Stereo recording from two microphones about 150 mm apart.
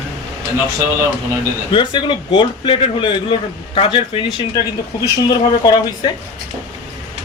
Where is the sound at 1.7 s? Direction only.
30° left (ahead or behind).